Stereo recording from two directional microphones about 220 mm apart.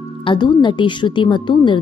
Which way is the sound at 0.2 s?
20° left (ahead or behind).